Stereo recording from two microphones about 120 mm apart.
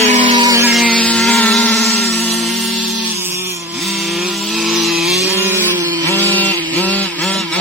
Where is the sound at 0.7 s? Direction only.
Centre (ahead or behind).